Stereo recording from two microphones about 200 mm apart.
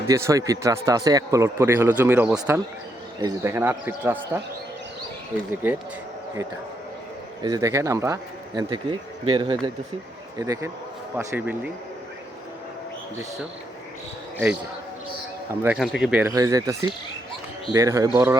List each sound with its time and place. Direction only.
0.1 s a man's voice: 15° right (ahead or behind)
5.6 s a man's voice: 10° right (ahead or behind)
7.4 s a man's voice: 15° right (ahead or behind)
15.6 s a man's voice: centre (ahead or behind)
16.2 s a man's voice: 15° right (ahead or behind)